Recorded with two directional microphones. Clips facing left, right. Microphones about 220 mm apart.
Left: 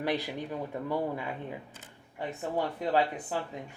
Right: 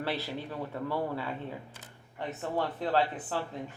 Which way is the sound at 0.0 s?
15° left (ahead or behind).